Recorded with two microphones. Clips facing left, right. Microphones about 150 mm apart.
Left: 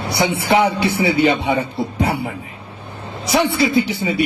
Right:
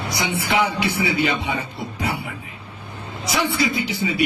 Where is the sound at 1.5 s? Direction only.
30° left (ahead or behind).